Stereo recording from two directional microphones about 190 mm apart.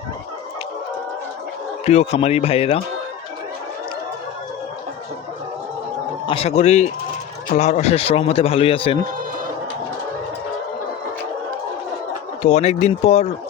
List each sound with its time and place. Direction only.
1.8 s a man's voice: 35° left (ahead or behind)
6.2 s a man's voice: 30° left (ahead or behind)
12.4 s a man's voice: 35° left (ahead or behind)